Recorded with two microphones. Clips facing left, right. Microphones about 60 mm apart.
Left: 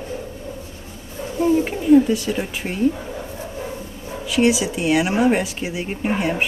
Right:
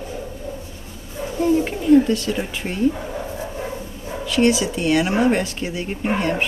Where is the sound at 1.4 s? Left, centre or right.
Centre.